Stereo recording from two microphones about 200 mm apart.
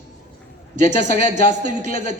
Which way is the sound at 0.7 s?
35° right (ahead or behind).